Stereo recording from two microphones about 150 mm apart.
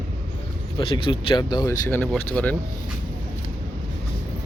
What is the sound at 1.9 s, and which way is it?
Speech, 10° left (ahead or behind).